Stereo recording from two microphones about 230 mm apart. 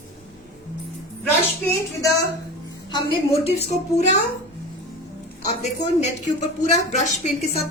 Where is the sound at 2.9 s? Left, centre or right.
Left.